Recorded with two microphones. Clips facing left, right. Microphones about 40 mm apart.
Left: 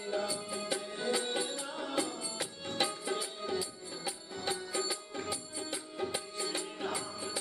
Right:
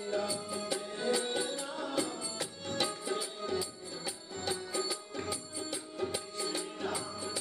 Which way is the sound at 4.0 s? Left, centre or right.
Centre.